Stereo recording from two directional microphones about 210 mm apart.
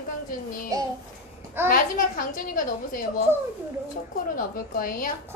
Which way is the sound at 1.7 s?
40° left (ahead or behind).